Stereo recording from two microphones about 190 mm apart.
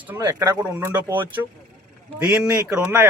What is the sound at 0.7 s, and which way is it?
Speech, 10° right (ahead or behind).